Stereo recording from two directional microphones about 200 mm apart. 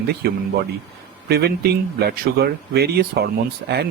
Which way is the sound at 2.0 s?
50° right (ahead or behind).